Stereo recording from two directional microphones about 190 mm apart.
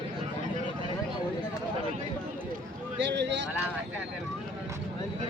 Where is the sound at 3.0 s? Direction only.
65° right (ahead or behind).